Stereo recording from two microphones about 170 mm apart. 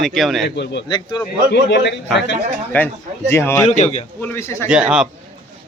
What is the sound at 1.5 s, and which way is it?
Speech, 85° left.